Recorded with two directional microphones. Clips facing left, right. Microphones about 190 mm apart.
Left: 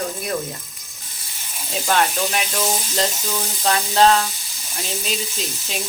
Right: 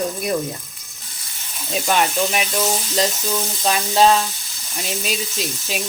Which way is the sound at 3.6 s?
10° right (ahead or behind).